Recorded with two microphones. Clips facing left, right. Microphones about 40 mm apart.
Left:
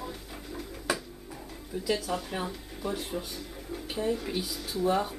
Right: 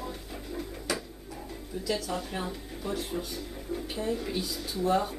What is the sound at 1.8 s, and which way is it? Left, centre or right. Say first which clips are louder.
Speech: left 1 dB; centre.